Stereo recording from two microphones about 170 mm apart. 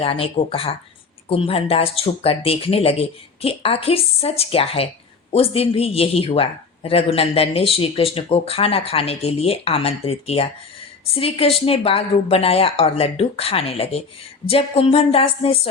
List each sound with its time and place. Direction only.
0.0 s speech: 35° left (ahead or behind)